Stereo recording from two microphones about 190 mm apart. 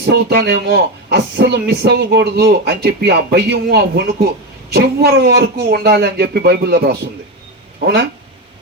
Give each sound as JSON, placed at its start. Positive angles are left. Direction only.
{"t": 0.0, "sound": "speech", "side_deg": -55}